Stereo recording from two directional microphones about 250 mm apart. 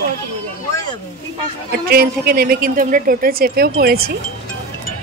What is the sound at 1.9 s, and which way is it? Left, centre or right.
A woman's voice, right.